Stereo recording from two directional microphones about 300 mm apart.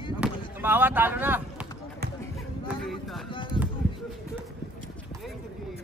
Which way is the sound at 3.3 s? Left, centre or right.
Centre.